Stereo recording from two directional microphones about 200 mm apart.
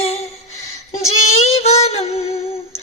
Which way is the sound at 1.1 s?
30° left (ahead or behind).